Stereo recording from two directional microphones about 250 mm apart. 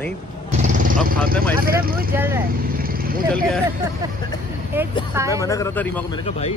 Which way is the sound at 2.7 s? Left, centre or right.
Right.